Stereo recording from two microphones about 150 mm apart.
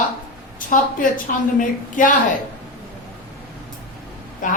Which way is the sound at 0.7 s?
65° left (ahead or behind).